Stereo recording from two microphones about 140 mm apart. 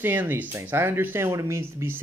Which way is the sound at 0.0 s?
15° right (ahead or behind).